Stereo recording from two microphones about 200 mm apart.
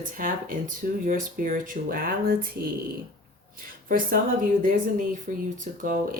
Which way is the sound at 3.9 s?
45° right (ahead or behind).